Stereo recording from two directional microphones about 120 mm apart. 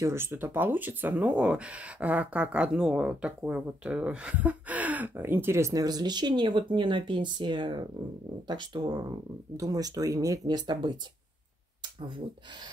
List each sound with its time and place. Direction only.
0.0 s speech: 20° right (ahead or behind)